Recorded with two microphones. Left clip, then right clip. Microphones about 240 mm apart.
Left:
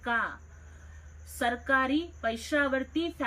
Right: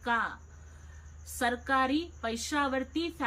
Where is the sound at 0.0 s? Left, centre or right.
Centre.